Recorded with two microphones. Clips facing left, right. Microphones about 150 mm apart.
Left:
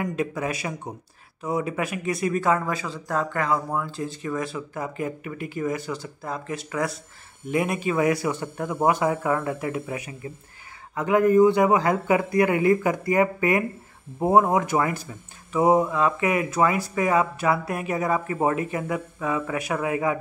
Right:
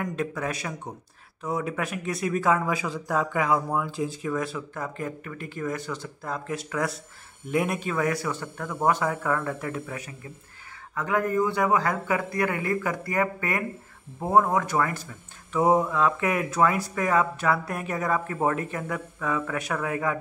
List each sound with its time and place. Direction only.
0.0 s a man's voice: 5° left (ahead or behind)